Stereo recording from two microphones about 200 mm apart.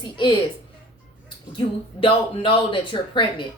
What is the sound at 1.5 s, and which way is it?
A woman's voice, 25° left (ahead or behind).